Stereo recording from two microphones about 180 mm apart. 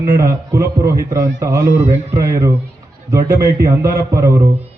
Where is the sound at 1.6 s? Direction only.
45° right (ahead or behind).